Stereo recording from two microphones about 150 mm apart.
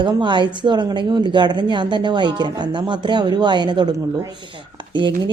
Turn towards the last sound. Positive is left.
turn(degrees=-30)  # may be behind; listen again after turning